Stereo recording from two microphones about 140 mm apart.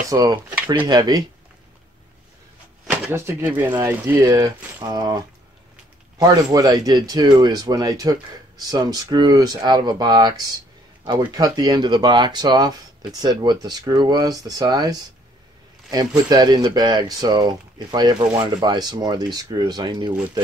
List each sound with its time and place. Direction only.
0.1 s speech: 25° right (ahead or behind)
2.9 s speech: 15° right (ahead or behind)
6.2 s speech: 25° right (ahead or behind)
16.3 s speech: 30° right (ahead or behind)